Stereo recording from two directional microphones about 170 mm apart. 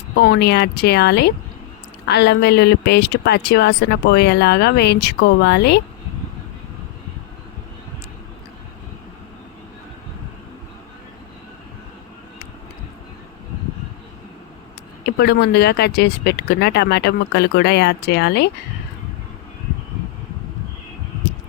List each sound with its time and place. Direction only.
0.2 s speech: 75° left (ahead or behind)
15.0 s speech: 70° left (ahead or behind)